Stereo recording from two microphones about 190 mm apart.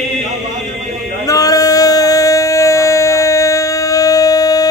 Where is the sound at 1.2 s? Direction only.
20° left (ahead or behind).